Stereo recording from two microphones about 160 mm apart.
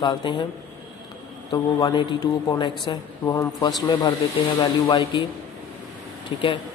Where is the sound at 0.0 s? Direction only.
30° left (ahead or behind).